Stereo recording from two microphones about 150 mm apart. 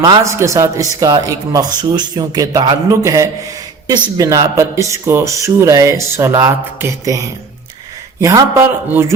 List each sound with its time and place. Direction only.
0.0 s speech: 25° right (ahead or behind)